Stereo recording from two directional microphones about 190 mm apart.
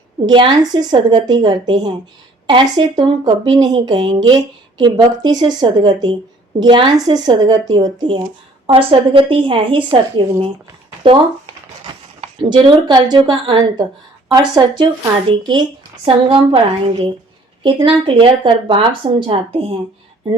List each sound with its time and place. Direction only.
0.3 s speech: 20° right (ahead or behind)
12.2 s a woman's voice: 25° right (ahead or behind)